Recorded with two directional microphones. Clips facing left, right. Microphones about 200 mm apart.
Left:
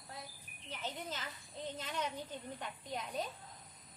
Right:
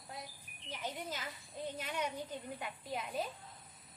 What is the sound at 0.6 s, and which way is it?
A woman's voice, 10° right (ahead or behind).